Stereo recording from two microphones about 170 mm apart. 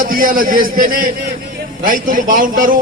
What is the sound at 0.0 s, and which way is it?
A man's voice, 55° right (ahead or behind).